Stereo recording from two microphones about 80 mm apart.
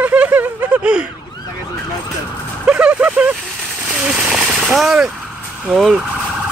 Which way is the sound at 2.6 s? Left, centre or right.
Centre.